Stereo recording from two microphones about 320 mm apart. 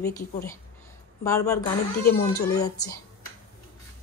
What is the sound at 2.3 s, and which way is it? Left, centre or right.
Speech, left.